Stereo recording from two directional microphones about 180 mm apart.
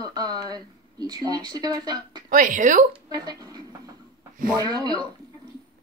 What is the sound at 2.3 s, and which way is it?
Speech, 45° right (ahead or behind).